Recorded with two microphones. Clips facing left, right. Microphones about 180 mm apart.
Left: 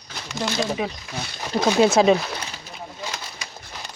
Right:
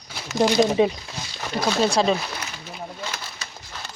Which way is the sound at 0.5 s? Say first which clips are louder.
Right 7 dB; 20° right (ahead or behind).